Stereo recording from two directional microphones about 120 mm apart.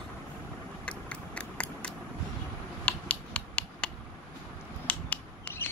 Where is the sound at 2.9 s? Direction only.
10° left (ahead or behind).